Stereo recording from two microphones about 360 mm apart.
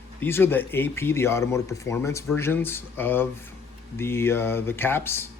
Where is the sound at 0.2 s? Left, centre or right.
Centre.